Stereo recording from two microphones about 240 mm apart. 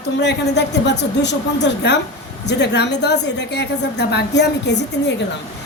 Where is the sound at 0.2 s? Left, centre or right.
Left.